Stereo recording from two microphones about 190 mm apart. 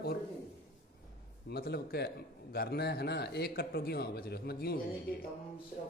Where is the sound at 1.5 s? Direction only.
55° left (ahead or behind).